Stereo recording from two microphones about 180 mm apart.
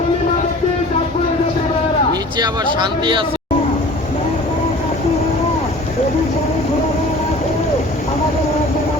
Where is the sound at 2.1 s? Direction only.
20° right (ahead or behind).